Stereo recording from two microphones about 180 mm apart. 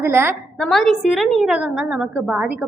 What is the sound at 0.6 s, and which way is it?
A woman's voice, centre (ahead or behind).